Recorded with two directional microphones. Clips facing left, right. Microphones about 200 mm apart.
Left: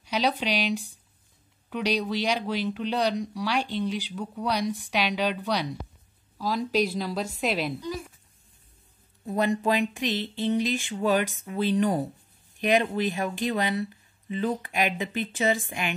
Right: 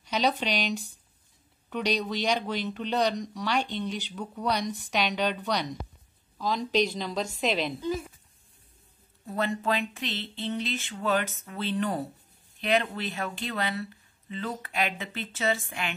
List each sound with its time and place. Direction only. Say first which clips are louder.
0.0 s speech: left 1 dB; 5° left (ahead or behind)
9.2 s speech: left 4 dB; 15° left (ahead or behind)